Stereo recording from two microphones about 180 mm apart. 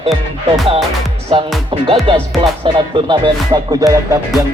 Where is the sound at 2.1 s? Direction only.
30° right (ahead or behind).